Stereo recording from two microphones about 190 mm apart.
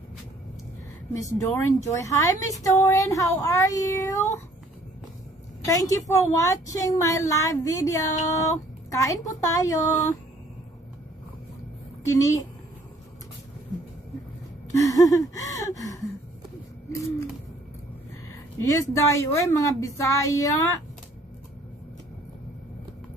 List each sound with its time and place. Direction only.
1.2 s a woman's voice: 15° left (ahead or behind)
5.7 s a woman's voice: 15° left (ahead or behind)
12.0 s a woman's voice: 15° left (ahead or behind)
14.7 s gasp: 15° left (ahead or behind)
18.6 s a woman's voice: 15° left (ahead or behind)